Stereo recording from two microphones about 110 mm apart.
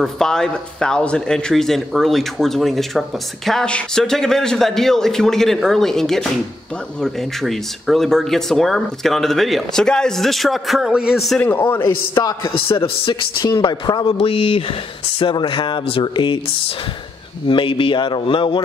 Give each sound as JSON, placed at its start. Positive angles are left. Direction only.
{"t": 0.0, "sound": "speech", "side_deg": 5}
{"t": 11.4, "sound": "a man's voice", "side_deg": 15}
{"t": 12.4, "sound": "speech", "side_deg": 55}
{"t": 13.4, "sound": "a woman's voice", "side_deg": 40}
{"t": 14.1, "sound": "speech", "side_deg": 55}